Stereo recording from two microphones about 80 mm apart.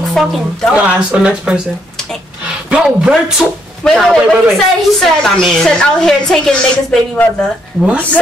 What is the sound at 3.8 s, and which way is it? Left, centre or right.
Speech, centre.